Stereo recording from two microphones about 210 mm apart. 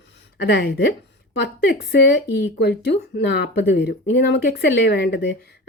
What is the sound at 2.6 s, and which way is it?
Speech, 50° left (ahead or behind).